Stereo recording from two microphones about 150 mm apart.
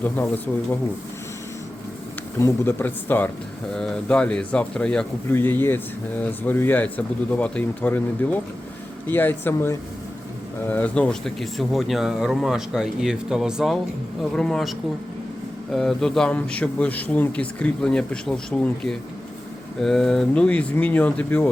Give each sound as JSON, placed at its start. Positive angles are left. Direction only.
{"t": 0.0, "sound": "speech", "side_deg": 10}
{"t": 2.4, "sound": "speech", "side_deg": 15}